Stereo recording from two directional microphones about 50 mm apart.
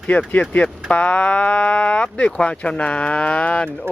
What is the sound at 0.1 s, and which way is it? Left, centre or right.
Speech, left.